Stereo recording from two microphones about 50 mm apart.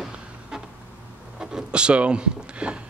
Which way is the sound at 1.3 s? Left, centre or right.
Centre.